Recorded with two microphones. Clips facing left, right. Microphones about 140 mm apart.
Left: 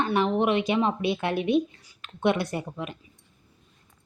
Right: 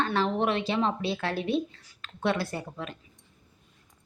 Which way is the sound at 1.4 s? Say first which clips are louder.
Left 5 dB; 35° right (ahead or behind).